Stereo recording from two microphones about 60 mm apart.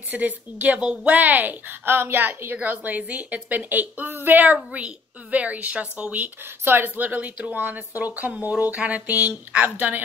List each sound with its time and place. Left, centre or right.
0.1 s a woman's voice: right
4.7 s a woman's voice: right
6.6 s a woman's voice: right